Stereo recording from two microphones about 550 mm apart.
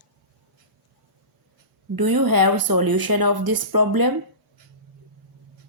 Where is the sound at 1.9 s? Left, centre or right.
Right.